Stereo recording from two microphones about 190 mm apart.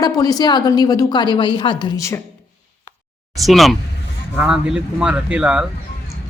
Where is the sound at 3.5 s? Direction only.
Centre (ahead or behind).